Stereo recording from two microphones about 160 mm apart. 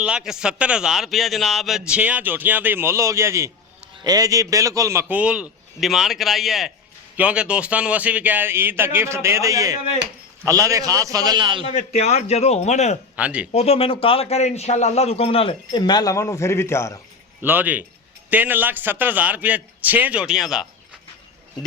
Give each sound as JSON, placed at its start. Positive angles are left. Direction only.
{"t": 0.0, "sound": "a man's voice", "side_deg": -5}
{"t": 11.6, "sound": "a man's voice", "side_deg": 40}
{"t": 13.1, "sound": "a man's voice", "side_deg": -10}
{"t": 13.5, "sound": "a man's voice", "side_deg": 40}
{"t": 17.4, "sound": "a man's voice", "side_deg": -10}